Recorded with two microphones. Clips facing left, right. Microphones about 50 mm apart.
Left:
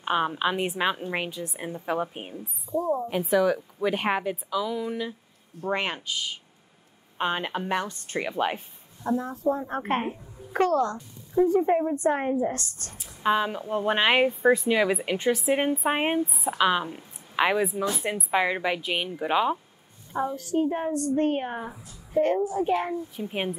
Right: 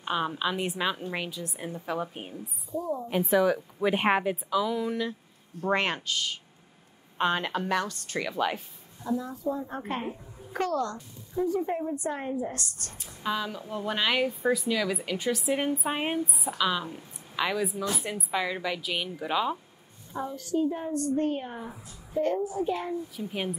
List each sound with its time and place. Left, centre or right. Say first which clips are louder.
0.0 s a woman's voice: left 4 dB; left
2.7 s a woman's voice: left 5 dB; left
3.1 s a woman's voice: right 2 dB; centre
5.8 s a woman's voice: right 1 dB; centre; by 10.8 s left
10.8 s a woman's voice: left 5 dB; centre
11.4 s a woman's voice: left 6 dB; left
20.3 s a woman's voice: right 1 dB; left
23.1 s speech: left 3 dB; left